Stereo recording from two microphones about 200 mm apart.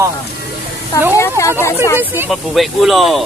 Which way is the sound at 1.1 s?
15° left (ahead or behind).